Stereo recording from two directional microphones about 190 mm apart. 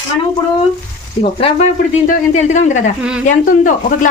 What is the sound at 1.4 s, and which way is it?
Speech, 35° left (ahead or behind).